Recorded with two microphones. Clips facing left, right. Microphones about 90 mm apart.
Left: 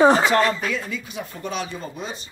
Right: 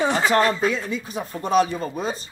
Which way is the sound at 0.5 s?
30° right (ahead or behind).